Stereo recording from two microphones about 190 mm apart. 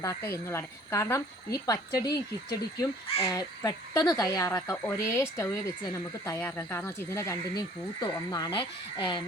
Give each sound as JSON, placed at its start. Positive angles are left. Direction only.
{"t": 0.0, "sound": "speech", "side_deg": 15}